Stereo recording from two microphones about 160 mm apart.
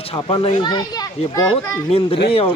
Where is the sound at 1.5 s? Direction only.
35° left (ahead or behind).